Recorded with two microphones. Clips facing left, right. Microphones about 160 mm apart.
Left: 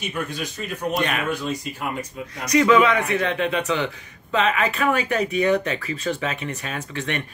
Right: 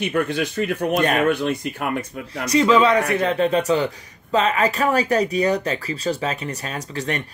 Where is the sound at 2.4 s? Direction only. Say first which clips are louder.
Right 1 dB; 30° right (ahead or behind).